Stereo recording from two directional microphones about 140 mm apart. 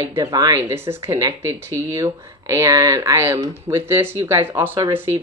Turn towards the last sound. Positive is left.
turn(degrees=-15)  # may be behind; listen again after turning